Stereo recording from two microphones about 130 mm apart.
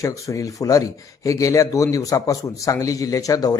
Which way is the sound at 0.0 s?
25° left (ahead or behind).